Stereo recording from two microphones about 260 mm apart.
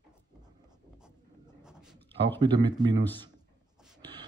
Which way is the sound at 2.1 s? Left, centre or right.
Centre.